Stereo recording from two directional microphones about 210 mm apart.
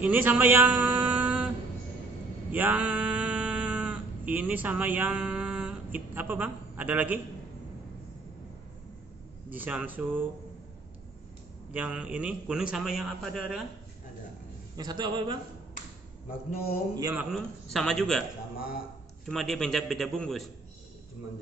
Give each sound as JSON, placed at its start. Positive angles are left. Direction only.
{"t": 0.0, "sound": "a sound", "side_deg": -10}
{"t": 2.5, "sound": "a sound", "side_deg": -10}
{"t": 9.5, "sound": "a man's voice", "side_deg": -10}
{"t": 11.7, "sound": "a man's voice", "side_deg": -5}
{"t": 14.8, "sound": "a man's voice", "side_deg": -20}
{"t": 16.3, "sound": "speech", "side_deg": 40}
{"t": 16.9, "sound": "a man's voice", "side_deg": -10}
{"t": 19.2, "sound": "a man's voice", "side_deg": 0}